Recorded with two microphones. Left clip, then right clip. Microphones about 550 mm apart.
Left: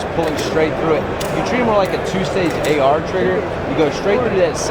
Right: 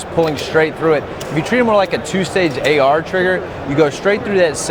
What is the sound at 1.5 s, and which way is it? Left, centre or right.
Speech, right.